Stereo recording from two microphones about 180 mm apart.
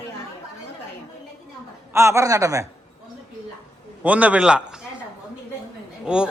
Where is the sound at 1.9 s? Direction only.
15° right (ahead or behind).